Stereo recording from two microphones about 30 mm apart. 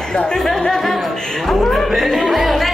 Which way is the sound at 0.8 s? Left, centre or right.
Centre.